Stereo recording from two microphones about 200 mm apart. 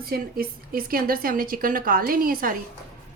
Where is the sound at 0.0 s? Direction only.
50° right (ahead or behind).